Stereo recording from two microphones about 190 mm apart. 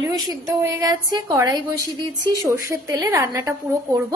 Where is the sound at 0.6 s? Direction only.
20° right (ahead or behind).